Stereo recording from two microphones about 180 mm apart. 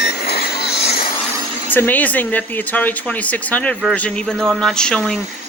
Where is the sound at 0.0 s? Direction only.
60° left (ahead or behind).